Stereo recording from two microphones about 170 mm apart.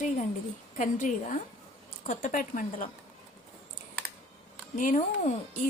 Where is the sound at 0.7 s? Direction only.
45° left (ahead or behind).